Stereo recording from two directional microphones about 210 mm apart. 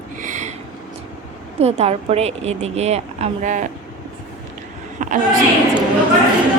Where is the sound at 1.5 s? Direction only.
30° right (ahead or behind).